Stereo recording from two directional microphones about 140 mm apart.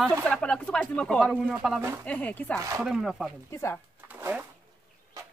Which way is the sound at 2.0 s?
10° left (ahead or behind).